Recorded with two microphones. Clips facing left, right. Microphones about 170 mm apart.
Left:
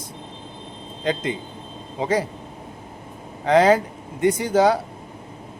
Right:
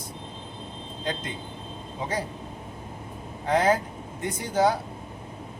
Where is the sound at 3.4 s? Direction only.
90° left.